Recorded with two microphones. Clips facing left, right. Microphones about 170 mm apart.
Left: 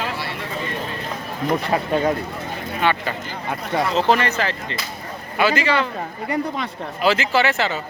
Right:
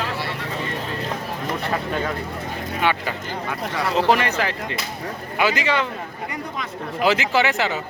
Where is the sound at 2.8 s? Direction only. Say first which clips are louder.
Left 2 dB; 10° right (ahead or behind).